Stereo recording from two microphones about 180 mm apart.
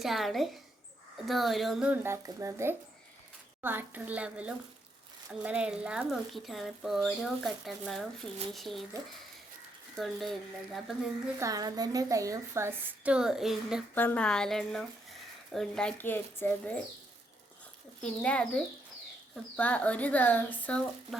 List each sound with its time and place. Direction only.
0.0 s a woman's voice: centre (ahead or behind)
10.0 s speech: centre (ahead or behind)
11.3 s a woman's voice: 20° right (ahead or behind); by 13.8 s 5° right (ahead or behind)
13.9 s speech: 10° left (ahead or behind)
18.0 s speech: 5° left (ahead or behind)